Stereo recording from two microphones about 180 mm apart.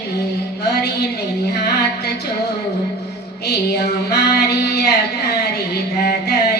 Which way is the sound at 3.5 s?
65° left (ahead or behind).